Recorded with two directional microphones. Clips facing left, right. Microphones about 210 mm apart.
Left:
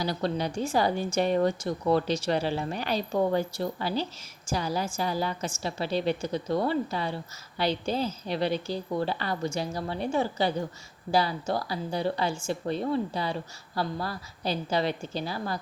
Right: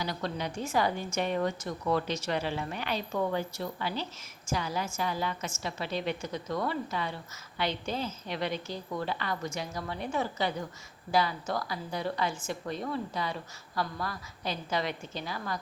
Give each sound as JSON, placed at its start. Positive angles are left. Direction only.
{"t": 0.0, "sound": "a woman's voice", "side_deg": 35}